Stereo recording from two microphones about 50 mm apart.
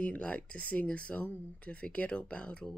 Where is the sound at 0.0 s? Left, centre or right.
Left.